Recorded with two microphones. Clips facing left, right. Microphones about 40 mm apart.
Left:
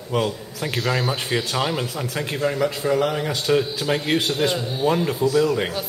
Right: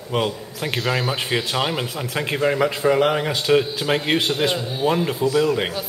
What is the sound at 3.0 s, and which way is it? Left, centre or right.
Speech, right.